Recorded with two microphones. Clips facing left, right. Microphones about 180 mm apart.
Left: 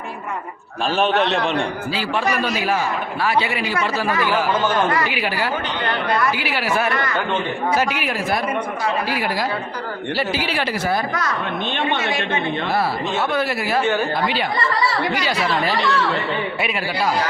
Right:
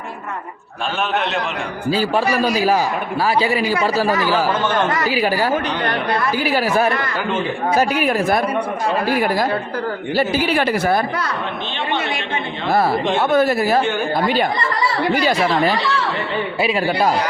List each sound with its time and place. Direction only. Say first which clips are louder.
1.1 s a man's voice: left 2 dB; centre (ahead or behind)
1.9 s a woman's voice: right 8 dB; 40° right (ahead or behind)
11.1 s a woman's voice: even; 30° right (ahead or behind)
12.7 s speech: right 8 dB; 50° right (ahead or behind)
15.1 s speech: right 4 dB; 50° right (ahead or behind)